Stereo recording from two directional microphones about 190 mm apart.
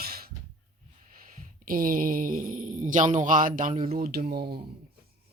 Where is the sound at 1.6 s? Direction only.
45° right (ahead or behind).